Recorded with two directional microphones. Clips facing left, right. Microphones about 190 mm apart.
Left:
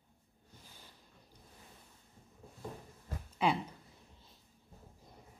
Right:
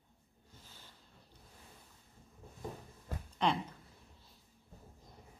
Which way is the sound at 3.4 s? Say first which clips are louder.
Left 1 dB; 5° left (ahead or behind).